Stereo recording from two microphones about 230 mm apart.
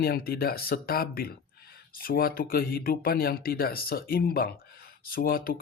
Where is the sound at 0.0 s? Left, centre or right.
Left.